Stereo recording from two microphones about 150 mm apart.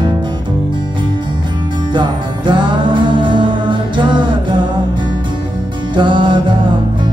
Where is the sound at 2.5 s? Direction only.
30° right (ahead or behind).